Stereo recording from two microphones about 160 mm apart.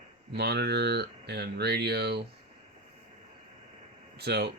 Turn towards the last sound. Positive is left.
turn(degrees=-90)